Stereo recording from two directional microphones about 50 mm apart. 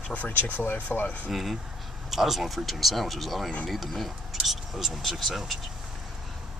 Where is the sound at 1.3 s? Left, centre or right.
Centre.